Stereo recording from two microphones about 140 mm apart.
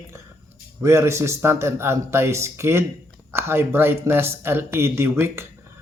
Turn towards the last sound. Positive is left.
turn(degrees=-20)  # may be behind; listen again after turning